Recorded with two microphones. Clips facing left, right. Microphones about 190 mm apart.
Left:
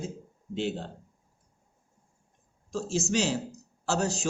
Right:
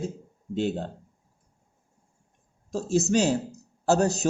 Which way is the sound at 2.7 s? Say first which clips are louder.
Right 5 dB; 50° right (ahead or behind).